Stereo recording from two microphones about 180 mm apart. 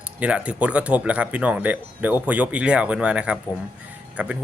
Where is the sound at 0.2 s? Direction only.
5° right (ahead or behind).